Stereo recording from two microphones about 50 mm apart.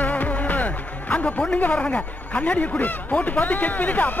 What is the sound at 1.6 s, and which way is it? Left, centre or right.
Speech, left.